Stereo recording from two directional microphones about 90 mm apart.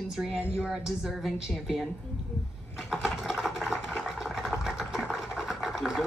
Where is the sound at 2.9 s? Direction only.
5° right (ahead or behind).